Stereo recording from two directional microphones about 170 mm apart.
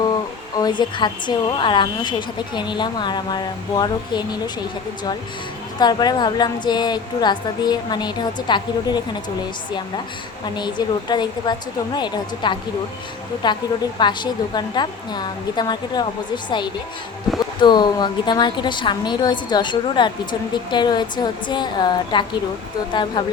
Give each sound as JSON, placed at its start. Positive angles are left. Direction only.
{"t": 0.5, "sound": "a woman's voice", "side_deg": 25}
{"t": 5.8, "sound": "a woman's voice", "side_deg": 25}
{"t": 10.4, "sound": "a woman's voice", "side_deg": 25}
{"t": 17.3, "sound": "speech", "side_deg": 0}
{"t": 17.6, "sound": "a woman's voice", "side_deg": 25}